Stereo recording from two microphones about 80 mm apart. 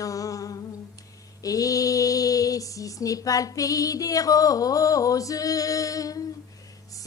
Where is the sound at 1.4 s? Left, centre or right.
Left.